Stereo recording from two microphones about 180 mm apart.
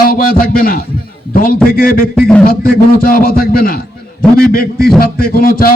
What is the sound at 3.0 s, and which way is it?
A man's voice, 55° left (ahead or behind).